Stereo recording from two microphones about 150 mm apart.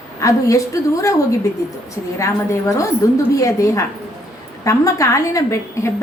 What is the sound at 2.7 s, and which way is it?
A woman's voice, 20° left (ahead or behind).